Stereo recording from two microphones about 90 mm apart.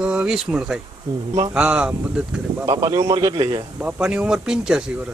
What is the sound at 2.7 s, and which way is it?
Speech, 40° right (ahead or behind).